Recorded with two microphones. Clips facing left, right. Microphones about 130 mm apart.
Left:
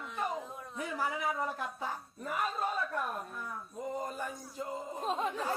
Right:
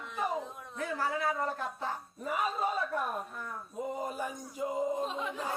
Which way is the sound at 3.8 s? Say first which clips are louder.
Right 2 dB; 10° right (ahead or behind).